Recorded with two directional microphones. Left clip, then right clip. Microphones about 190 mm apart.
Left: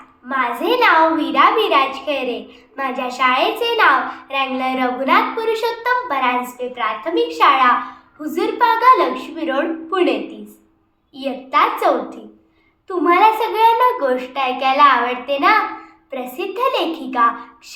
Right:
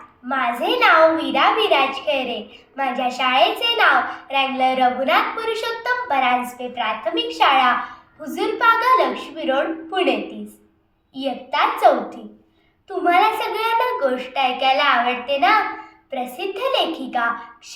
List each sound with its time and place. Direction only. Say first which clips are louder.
0.3 s a child's voice: left 2 dB; 20° left (ahead or behind)